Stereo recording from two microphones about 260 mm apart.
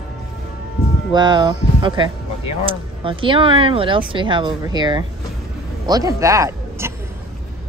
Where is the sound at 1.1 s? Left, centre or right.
Centre.